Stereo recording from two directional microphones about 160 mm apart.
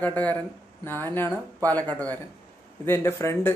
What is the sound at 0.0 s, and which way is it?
Speech, 10° left (ahead or behind).